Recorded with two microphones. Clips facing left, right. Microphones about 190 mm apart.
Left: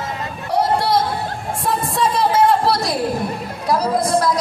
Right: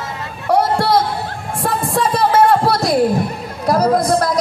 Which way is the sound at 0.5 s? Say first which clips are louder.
Right 3 dB; 55° right (ahead or behind).